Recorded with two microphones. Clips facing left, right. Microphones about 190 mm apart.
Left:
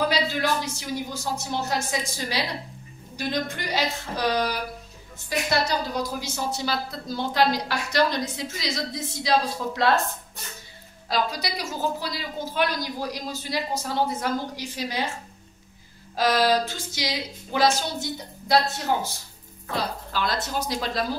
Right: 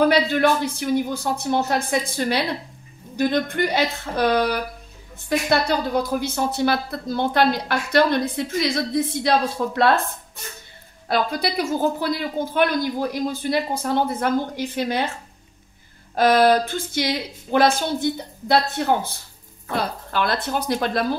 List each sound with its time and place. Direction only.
0.1 s a woman's voice: 55° right (ahead or behind)
11.1 s a woman's voice: 55° right (ahead or behind)
16.2 s a woman's voice: 55° right (ahead or behind)